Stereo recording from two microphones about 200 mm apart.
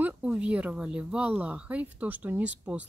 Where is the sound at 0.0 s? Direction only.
5° right (ahead or behind).